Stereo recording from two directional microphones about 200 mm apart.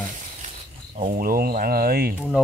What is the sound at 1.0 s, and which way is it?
Speech, 40° right (ahead or behind).